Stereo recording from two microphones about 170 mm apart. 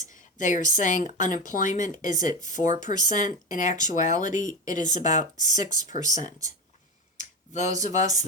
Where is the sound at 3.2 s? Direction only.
50° left (ahead or behind).